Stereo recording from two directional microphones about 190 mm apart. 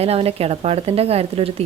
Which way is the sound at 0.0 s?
30° right (ahead or behind).